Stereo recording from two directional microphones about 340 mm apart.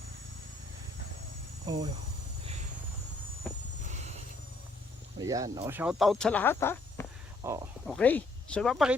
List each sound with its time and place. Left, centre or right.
1.6 s speech: centre
3.8 s train: centre
5.2 s speech: centre
7.4 s speech: centre